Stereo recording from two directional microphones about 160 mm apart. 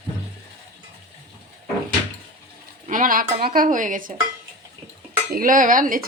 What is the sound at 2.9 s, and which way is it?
Speech, 60° right (ahead or behind).